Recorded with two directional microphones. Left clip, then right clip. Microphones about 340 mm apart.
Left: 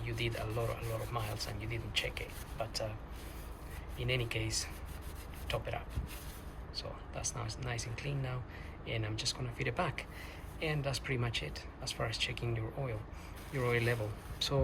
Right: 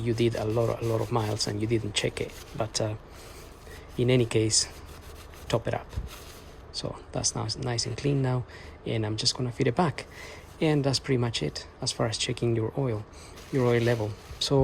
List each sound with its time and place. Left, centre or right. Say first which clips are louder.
0.0 s speech: right 12 dB; centre
3.9 s speech: right 12 dB; centre